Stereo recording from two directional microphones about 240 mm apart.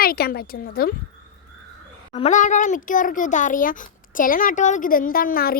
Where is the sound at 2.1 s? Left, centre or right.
Left.